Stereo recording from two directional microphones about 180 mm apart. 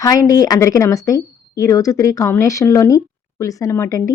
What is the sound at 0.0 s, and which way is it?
Speech, 20° left (ahead or behind).